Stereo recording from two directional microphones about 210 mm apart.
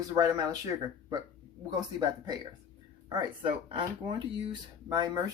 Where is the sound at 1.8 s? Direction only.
20° right (ahead or behind).